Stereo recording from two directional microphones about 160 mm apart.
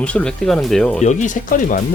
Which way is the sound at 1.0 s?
55° left (ahead or behind).